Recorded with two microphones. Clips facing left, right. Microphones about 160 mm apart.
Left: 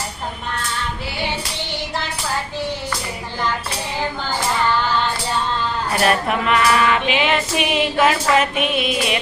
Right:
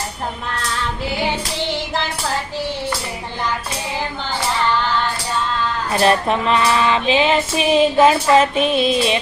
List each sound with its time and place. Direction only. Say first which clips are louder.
6.0 s female singing: right 3 dB; 25° right (ahead or behind)